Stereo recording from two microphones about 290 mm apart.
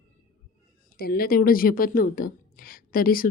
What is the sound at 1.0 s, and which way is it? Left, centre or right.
A woman's voice, left.